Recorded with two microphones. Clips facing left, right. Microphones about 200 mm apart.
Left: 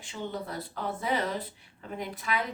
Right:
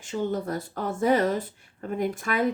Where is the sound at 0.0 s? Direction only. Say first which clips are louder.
Right 8 dB; 45° right (ahead or behind).